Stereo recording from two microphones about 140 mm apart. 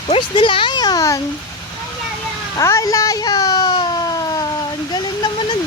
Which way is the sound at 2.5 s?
25° left (ahead or behind).